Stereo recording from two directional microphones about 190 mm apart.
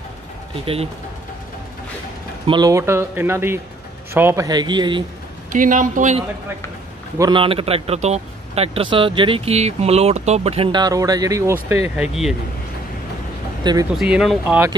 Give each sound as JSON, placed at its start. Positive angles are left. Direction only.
{"t": 2.4, "sound": "speech", "side_deg": -20}
{"t": 5.5, "sound": "speech", "side_deg": -45}
{"t": 7.2, "sound": "a man's voice", "side_deg": -25}
{"t": 12.0, "sound": "speech", "side_deg": 0}
{"t": 13.9, "sound": "speech", "side_deg": -5}